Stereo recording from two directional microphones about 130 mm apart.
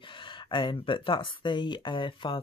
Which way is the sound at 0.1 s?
40° left (ahead or behind).